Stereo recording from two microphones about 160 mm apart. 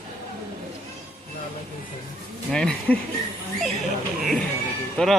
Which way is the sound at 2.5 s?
5° left (ahead or behind).